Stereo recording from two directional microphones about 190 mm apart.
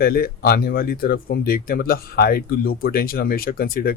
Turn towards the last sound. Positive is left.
turn(degrees=50)  # may be behind; listen again after turning